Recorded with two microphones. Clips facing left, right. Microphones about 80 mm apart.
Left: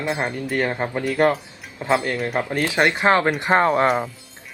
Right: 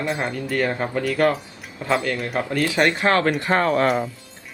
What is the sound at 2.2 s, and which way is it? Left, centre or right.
Speech, left.